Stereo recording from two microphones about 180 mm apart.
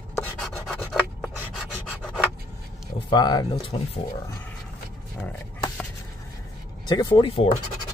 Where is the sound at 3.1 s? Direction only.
25° left (ahead or behind).